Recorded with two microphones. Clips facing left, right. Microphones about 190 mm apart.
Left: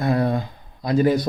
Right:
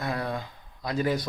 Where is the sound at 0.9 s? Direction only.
25° left (ahead or behind).